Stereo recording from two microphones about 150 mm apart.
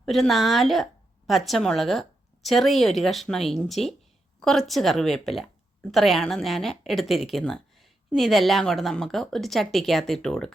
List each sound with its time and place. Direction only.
0.0 s speech: centre (ahead or behind)